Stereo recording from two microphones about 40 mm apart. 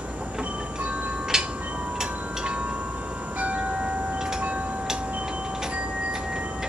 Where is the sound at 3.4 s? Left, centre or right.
Right.